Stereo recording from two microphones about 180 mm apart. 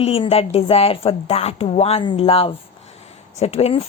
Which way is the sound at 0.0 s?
35° left (ahead or behind).